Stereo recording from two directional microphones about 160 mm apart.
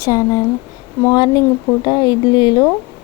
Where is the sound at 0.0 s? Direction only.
20° left (ahead or behind).